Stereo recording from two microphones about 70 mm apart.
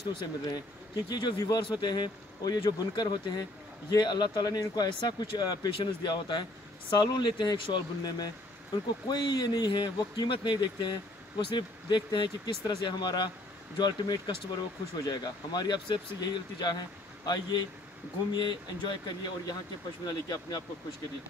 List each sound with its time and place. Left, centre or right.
0.2 s speech: left
9.0 s speech: left
20.1 s speech: left